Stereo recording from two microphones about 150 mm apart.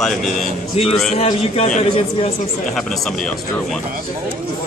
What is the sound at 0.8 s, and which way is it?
A man's voice, 45° left (ahead or behind).